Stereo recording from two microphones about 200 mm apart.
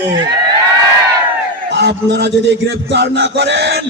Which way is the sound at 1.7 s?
60° right (ahead or behind).